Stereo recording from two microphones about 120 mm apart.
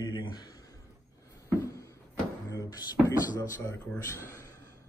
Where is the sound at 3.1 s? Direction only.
25° left (ahead or behind).